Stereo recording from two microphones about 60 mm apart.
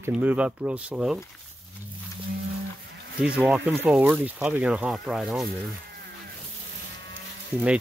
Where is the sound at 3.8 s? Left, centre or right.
Centre.